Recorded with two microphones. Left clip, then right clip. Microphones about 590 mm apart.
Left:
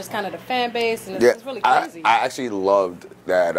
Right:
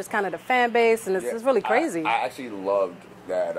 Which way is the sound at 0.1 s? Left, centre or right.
Right.